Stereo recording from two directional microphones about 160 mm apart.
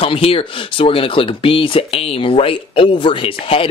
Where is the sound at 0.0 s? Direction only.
35° left (ahead or behind).